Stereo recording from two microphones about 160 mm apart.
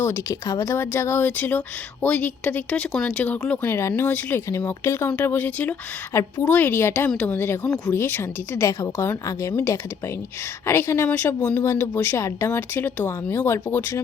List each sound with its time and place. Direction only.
0.0 s speech: 20° left (ahead or behind)